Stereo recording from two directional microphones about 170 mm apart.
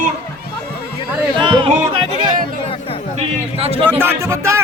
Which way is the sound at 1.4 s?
30° right (ahead or behind).